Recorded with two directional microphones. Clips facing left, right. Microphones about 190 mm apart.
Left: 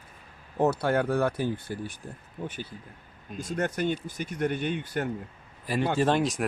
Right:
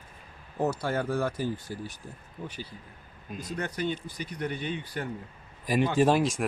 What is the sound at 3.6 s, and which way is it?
Speech, 50° left (ahead or behind).